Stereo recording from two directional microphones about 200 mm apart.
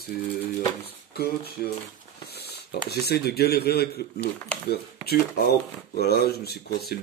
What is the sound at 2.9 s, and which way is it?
Speech, 55° left (ahead or behind).